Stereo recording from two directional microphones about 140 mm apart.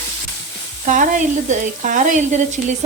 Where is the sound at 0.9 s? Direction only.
65° right (ahead or behind).